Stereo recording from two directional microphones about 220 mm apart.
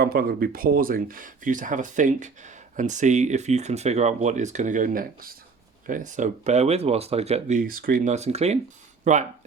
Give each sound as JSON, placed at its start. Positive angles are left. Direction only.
{"t": 0.0, "sound": "speech", "side_deg": -45}